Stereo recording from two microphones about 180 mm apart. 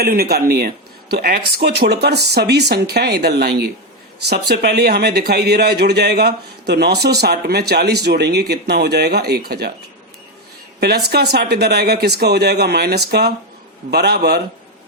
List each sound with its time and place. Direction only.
0.0 s speech: 60° right (ahead or behind)
10.8 s speech: 65° right (ahead or behind)